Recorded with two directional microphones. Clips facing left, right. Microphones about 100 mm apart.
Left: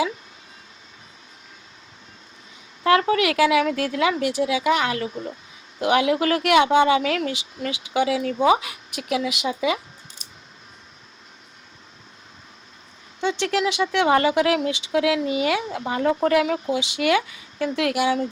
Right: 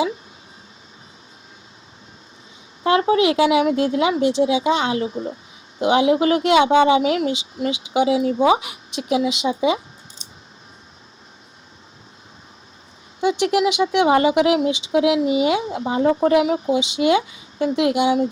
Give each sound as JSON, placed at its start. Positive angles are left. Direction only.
{"t": 2.8, "sound": "speech", "side_deg": -25}
{"t": 13.2, "sound": "speech", "side_deg": -15}